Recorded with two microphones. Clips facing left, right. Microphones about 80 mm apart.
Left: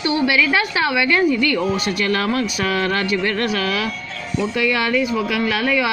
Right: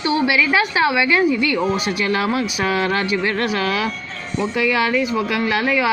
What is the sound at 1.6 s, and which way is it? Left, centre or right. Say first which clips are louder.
Speech: right 1 dB; right.